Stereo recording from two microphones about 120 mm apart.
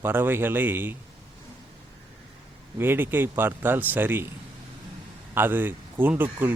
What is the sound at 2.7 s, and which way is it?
Speech, 15° right (ahead or behind).